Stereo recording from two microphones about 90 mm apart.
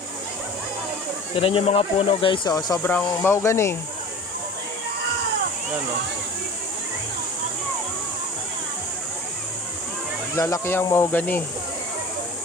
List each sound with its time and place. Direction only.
1.4 s speech: 90° left; by 2.5 s 70° left (ahead or behind)
2.5 s speech: 45° left (ahead or behind)
3.2 s speech: 30° left (ahead or behind)
10.3 s speech: 35° left (ahead or behind)